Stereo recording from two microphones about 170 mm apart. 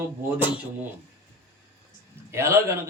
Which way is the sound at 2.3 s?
15° right (ahead or behind).